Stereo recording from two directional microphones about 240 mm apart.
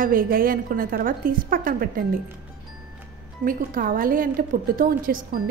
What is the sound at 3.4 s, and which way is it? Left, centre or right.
A woman's voice, right.